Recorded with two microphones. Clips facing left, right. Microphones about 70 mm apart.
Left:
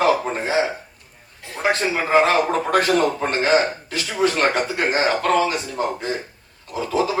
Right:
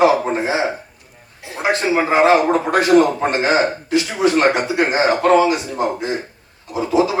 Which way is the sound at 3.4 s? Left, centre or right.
Right.